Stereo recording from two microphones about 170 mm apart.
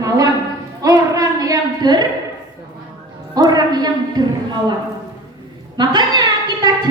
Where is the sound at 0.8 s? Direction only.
20° right (ahead or behind).